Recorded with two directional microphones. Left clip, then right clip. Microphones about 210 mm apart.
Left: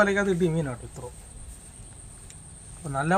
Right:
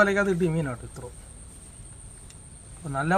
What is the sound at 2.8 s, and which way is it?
Speech, 5° left (ahead or behind).